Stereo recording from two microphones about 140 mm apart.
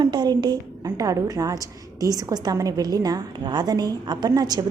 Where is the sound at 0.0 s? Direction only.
30° right (ahead or behind).